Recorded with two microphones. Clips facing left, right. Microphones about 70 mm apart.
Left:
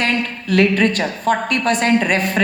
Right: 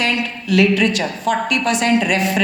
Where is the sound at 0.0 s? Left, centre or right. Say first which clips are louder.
Left 1 dB; left.